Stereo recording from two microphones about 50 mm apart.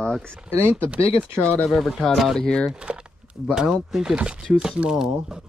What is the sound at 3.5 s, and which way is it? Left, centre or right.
Speech, centre.